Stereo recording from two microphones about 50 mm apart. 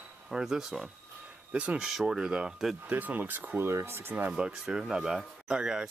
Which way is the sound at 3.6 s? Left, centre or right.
Right.